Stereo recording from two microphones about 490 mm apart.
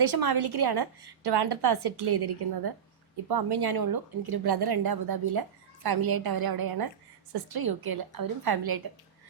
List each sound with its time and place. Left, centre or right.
0.0 s a woman's voice: right